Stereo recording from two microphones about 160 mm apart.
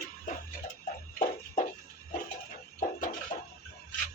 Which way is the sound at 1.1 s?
55° left (ahead or behind).